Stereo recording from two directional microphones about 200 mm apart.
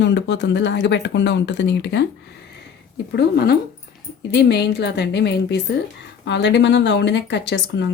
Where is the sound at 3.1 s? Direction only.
50° left (ahead or behind).